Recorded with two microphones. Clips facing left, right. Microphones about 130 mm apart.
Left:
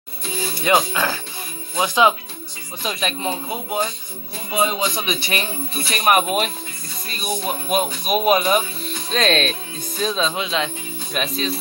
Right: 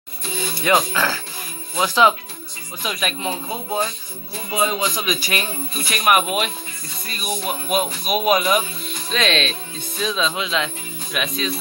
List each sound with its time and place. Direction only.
0.7 s speech: 20° left (ahead or behind)
2.8 s speech: 30° left (ahead or behind)